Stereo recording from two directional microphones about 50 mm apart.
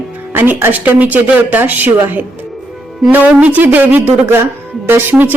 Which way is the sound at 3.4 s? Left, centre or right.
Right.